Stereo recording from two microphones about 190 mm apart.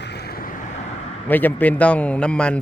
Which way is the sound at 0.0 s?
60° left (ahead or behind).